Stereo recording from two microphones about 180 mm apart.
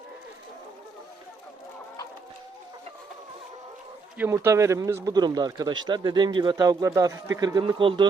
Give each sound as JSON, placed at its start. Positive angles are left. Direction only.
{"t": 4.2, "sound": "speech", "side_deg": -15}